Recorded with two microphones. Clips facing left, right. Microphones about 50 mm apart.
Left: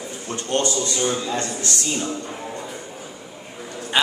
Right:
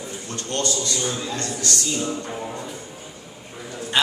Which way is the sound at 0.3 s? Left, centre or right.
Left.